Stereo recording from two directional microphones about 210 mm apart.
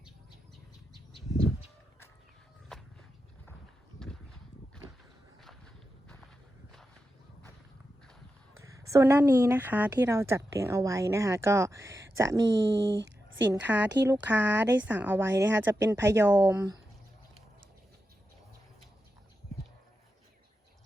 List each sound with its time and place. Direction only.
8.5 s a woman's voice: 15° right (ahead or behind)
12.5 s speech: 60° right (ahead or behind)
13.5 s a woman's voice: 10° right (ahead or behind)